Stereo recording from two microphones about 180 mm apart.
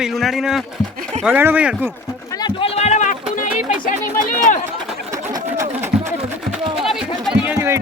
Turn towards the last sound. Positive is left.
turn(degrees=-15)  # may be behind; listen again after turning